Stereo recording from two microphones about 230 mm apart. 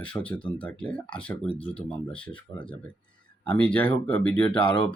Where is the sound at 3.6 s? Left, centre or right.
Centre.